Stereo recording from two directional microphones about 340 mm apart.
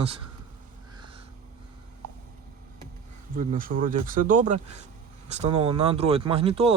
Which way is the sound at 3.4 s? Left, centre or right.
Right.